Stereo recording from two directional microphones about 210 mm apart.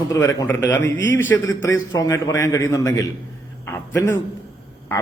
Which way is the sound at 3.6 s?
10° left (ahead or behind).